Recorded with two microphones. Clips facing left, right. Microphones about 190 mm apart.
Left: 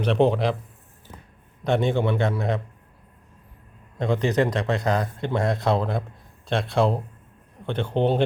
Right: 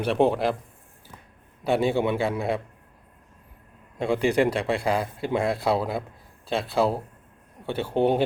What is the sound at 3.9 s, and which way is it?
Speech, 10° right (ahead or behind).